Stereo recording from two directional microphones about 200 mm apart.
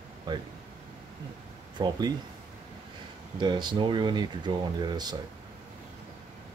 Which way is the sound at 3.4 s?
20° right (ahead or behind).